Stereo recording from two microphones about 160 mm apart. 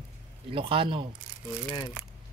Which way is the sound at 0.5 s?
35° right (ahead or behind).